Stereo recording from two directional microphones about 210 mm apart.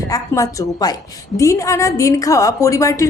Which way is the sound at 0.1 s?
15° left (ahead or behind).